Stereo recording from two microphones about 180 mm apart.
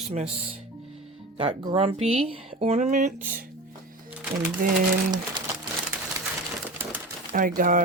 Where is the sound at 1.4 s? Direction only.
30° right (ahead or behind).